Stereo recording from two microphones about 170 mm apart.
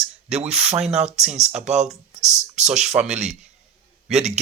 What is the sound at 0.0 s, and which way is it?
Speech, 40° right (ahead or behind).